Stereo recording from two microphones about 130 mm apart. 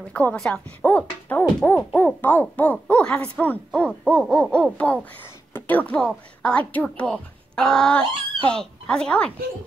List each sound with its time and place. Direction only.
0.1 s a woman's voice: 10° left (ahead or behind)